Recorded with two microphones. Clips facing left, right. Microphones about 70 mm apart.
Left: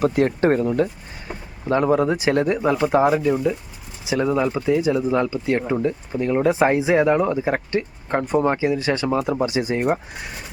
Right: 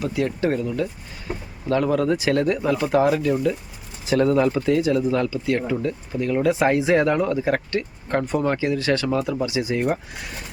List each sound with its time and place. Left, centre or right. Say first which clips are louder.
0.0 s speech: left 5 dB; left
1.6 s speech: left 2 dB; left
9.2 s speech: left 2 dB; left